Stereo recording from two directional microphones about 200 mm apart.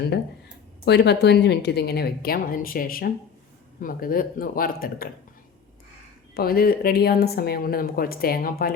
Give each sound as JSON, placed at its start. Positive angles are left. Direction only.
{"t": 0.9, "sound": "speech", "side_deg": 55}
{"t": 6.3, "sound": "speech", "side_deg": 50}